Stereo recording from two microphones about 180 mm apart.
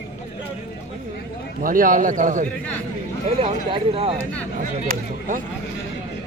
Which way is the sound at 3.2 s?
35° right (ahead or behind).